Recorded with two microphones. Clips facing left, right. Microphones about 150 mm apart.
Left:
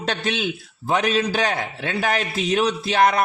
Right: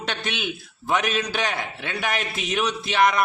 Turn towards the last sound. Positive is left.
turn(degrees=35)  # may be behind; listen again after turning